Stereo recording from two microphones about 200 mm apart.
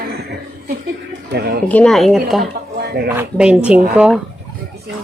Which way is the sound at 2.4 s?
50° right (ahead or behind).